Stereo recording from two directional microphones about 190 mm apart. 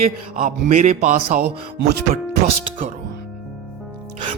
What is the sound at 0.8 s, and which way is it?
Speech, 35° right (ahead or behind).